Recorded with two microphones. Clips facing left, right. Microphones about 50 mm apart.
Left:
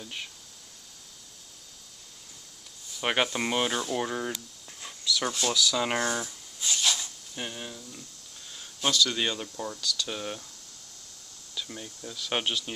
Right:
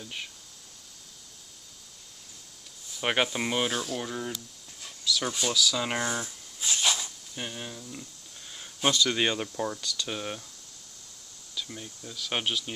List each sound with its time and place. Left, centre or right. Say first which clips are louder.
0.0 s speech: even; centre
2.9 s speech: even; centre
4.0 s speech: left 3 dB; left
5.0 s speech: left 1 dB; centre
6.6 s a sound: right 1 dB; centre
7.3 s speech: even; centre
8.5 s speech: right 1 dB; centre
11.5 s speech: even; centre